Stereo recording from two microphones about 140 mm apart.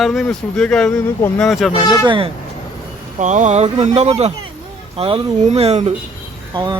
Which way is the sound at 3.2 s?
60° right (ahead or behind).